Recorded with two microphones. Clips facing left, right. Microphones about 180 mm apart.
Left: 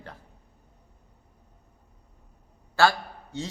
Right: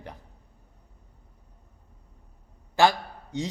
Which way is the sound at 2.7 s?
15° right (ahead or behind).